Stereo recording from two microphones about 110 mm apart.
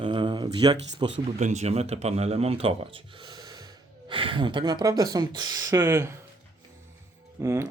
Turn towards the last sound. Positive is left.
turn(degrees=-25)  # may be behind; listen again after turning